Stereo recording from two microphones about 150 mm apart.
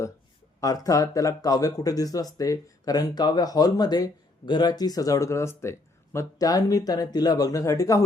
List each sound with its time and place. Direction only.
0.6 s speech: 25° left (ahead or behind)